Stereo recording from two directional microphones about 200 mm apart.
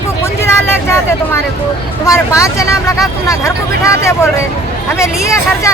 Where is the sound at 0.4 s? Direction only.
15° left (ahead or behind).